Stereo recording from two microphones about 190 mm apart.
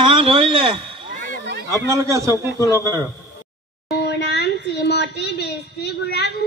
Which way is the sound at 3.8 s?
60° left (ahead or behind).